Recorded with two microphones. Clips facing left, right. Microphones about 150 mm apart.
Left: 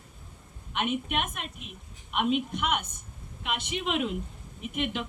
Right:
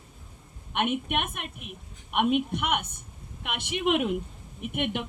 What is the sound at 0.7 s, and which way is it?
A woman's voice, 60° right (ahead or behind).